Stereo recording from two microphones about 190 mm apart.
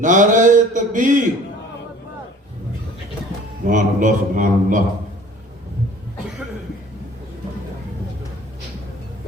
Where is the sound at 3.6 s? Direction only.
40° right (ahead or behind).